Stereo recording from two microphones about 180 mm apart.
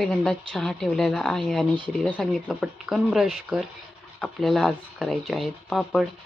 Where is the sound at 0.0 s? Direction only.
5° left (ahead or behind).